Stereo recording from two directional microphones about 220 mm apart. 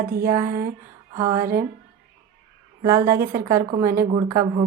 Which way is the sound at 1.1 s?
15° right (ahead or behind).